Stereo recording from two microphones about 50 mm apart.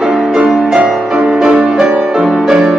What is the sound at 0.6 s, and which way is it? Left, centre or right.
Music, centre.